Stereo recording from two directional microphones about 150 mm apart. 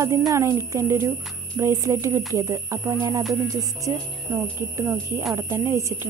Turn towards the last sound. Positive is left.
turn(degrees=-20)  # may be behind; listen again after turning